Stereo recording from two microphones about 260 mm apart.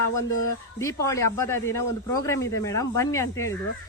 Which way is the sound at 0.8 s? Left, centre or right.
Centre.